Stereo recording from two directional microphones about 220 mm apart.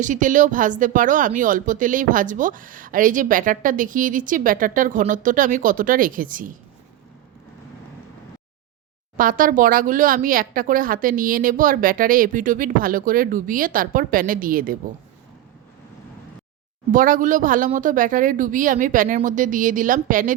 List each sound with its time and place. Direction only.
0.0 s speech: 35° right (ahead or behind)
9.1 s speech: 40° right (ahead or behind)
16.9 s speech: 40° right (ahead or behind)